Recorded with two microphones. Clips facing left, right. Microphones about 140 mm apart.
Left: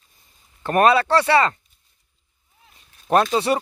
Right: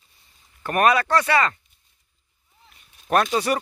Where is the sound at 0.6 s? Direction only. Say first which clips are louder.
Left 3 dB; 30° left (ahead or behind).